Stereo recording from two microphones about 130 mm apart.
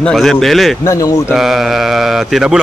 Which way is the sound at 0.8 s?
25° left (ahead or behind).